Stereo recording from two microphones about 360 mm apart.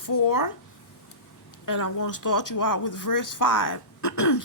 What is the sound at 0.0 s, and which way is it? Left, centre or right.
Speech, left.